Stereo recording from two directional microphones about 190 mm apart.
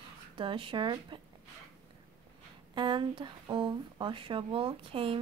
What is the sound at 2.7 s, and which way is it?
Speech, 25° right (ahead or behind).